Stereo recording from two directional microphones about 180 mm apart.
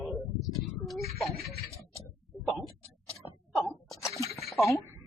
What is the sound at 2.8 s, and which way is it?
Tick-tock, 30° left (ahead or behind).